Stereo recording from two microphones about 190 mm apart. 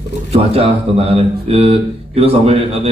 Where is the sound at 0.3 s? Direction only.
30° right (ahead or behind).